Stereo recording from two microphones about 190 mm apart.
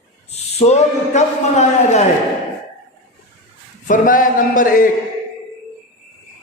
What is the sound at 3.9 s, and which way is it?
Speech, 45° left (ahead or behind).